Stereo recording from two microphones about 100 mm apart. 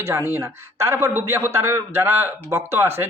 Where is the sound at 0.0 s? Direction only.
30° right (ahead or behind).